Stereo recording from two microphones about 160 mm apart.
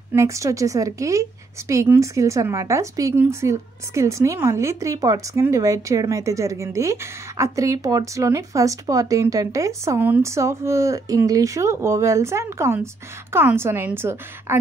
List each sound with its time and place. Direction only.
0.1 s speech: 20° right (ahead or behind)